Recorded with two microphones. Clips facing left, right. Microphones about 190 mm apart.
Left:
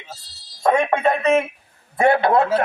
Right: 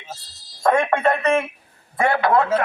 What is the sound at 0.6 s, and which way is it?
Speech, 15° left (ahead or behind).